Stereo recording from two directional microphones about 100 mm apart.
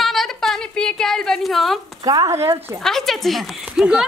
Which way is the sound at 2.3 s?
25° right (ahead or behind).